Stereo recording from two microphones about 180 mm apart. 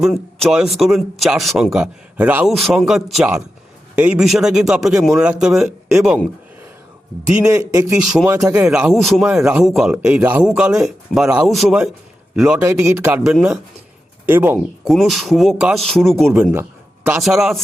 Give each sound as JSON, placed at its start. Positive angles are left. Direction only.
{"t": 0.0, "sound": "speech", "side_deg": 0}
{"t": 7.3, "sound": "a man's voice", "side_deg": -5}
{"t": 16.3, "sound": "a man's voice", "side_deg": -15}
{"t": 17.1, "sound": "speech", "side_deg": 0}